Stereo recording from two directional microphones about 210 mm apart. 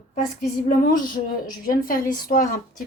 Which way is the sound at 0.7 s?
40° left (ahead or behind).